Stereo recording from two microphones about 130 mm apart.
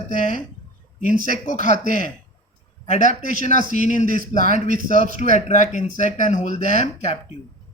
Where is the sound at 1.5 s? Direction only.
70° left (ahead or behind).